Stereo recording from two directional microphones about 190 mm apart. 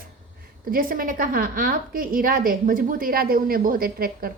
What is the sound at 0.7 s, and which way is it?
A woman's voice, 50° right (ahead or behind).